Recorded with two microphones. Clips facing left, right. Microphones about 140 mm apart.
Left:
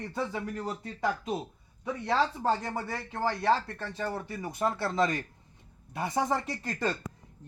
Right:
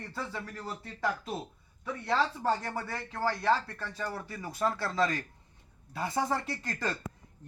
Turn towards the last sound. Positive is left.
turn(degrees=25)  # may be behind; listen again after turning